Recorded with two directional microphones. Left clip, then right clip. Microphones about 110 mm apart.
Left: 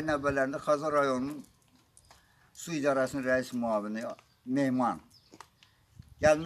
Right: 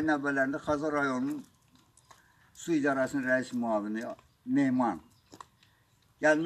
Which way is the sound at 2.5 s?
35° left (ahead or behind).